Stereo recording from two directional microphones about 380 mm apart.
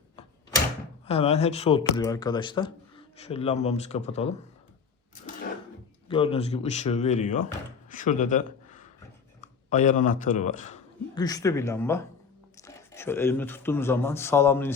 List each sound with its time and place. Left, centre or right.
1.0 s speech: centre
6.1 s speech: centre